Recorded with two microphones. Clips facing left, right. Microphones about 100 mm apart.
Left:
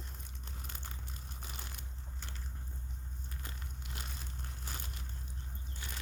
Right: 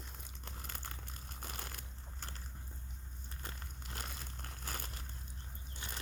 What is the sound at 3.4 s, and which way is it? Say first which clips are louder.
Crumpling: right 3 dB; 40° right (ahead or behind).